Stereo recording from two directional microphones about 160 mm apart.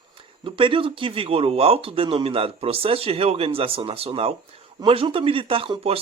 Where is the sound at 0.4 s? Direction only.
35° right (ahead or behind).